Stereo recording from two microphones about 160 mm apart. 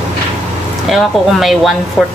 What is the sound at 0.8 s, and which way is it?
Speech, centre (ahead or behind).